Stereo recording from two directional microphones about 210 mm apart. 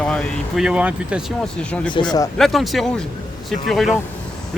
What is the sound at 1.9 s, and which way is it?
Speech, 20° left (ahead or behind).